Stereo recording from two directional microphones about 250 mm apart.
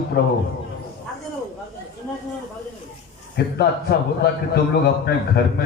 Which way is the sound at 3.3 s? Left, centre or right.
Left.